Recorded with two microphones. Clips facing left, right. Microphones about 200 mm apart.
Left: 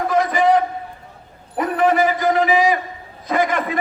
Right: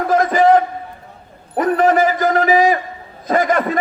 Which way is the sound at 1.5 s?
45° right (ahead or behind).